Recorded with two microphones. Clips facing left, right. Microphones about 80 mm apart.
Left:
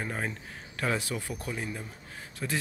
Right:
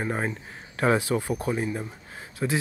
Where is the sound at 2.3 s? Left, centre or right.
Centre.